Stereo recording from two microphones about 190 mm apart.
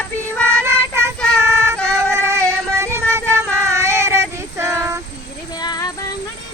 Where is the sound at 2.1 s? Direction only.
15° right (ahead or behind).